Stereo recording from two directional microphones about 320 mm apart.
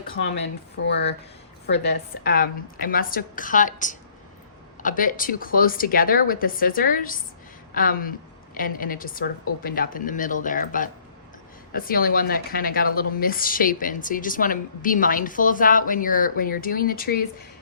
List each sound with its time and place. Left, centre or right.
0.3 s speech: left
2.2 s speech: left